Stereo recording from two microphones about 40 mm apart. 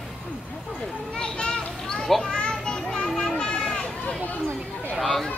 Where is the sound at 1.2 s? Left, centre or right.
Left.